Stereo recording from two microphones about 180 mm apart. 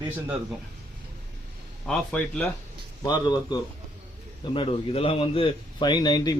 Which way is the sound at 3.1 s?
20° left (ahead or behind).